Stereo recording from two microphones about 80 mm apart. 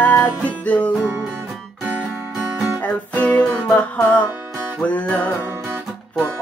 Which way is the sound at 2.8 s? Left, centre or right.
Left.